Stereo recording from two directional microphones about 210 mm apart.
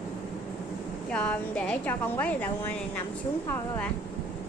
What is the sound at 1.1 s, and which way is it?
A woman's voice, 5° left (ahead or behind).